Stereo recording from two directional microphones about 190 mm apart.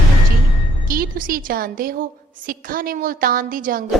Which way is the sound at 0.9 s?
45° right (ahead or behind).